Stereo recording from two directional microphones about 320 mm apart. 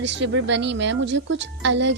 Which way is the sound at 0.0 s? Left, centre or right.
Right.